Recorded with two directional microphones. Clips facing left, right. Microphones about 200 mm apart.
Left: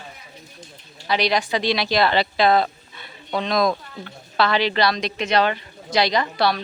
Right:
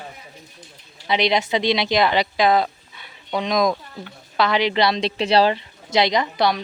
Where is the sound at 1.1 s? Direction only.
20° right (ahead or behind).